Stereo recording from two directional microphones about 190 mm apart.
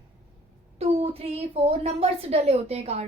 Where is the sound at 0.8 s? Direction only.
30° right (ahead or behind).